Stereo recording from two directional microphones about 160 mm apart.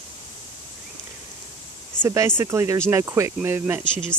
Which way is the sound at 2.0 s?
15° right (ahead or behind).